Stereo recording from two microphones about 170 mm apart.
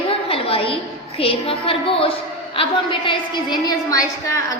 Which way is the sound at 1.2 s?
35° left (ahead or behind).